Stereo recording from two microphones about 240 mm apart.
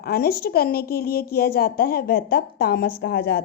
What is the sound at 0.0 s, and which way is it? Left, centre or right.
A woman's voice, left.